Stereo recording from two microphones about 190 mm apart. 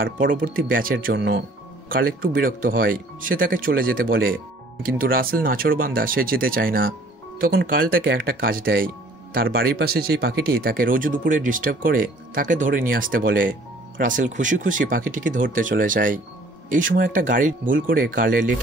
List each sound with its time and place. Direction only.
0.0 s speech: 45° right (ahead or behind)
1.1 s speech: 65° right (ahead or behind)
1.9 s speech: 50° right (ahead or behind)